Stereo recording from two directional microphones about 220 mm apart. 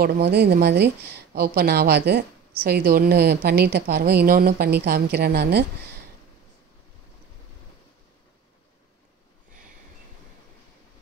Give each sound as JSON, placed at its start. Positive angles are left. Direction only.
{"t": 0.0, "sound": "a woman's voice", "side_deg": -45}